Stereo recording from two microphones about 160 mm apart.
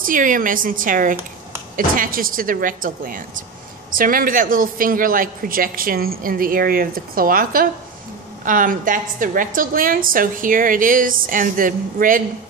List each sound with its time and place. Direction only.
0.0 s a man's voice: 55° right (ahead or behind)